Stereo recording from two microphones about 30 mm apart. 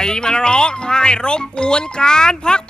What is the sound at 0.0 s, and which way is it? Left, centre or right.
Speech, left.